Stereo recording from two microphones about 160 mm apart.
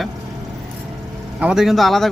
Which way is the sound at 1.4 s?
5° right (ahead or behind).